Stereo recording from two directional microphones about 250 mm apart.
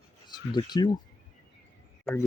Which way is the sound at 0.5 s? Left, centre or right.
Centre.